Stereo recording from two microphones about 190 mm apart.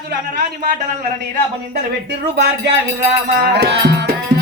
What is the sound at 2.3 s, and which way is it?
A man's voice, 60° right (ahead or behind).